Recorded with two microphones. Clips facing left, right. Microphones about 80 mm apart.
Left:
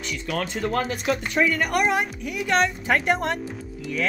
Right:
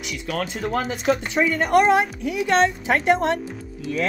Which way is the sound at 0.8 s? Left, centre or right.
Right.